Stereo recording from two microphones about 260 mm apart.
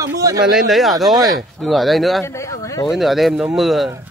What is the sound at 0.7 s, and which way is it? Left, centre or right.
Speech, centre.